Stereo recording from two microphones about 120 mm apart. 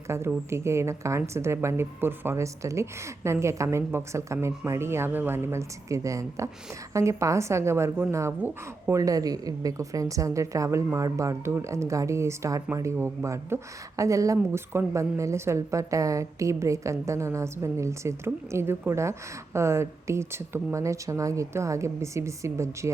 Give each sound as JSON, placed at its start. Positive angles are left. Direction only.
{"t": 0.3, "sound": "speech", "side_deg": -20}
{"t": 9.0, "sound": "speech", "side_deg": -30}